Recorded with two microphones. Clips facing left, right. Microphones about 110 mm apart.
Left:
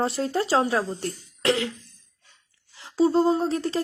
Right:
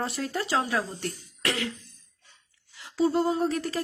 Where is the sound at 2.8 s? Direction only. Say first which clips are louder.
Left 4 dB; 30° left (ahead or behind).